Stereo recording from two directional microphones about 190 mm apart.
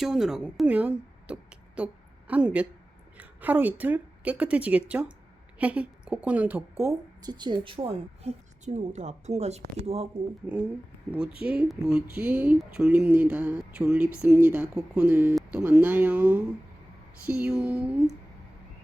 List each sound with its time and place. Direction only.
0.0 s a woman's voice: centre (ahead or behind); by 10.1 s 35° right (ahead or behind)
10.4 s speech: 5° right (ahead or behind)